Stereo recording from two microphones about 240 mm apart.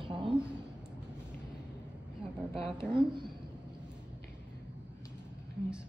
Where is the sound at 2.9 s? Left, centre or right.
Centre.